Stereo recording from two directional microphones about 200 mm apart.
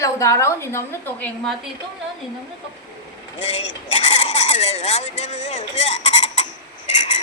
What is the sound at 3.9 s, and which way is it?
Speech, 35° left (ahead or behind).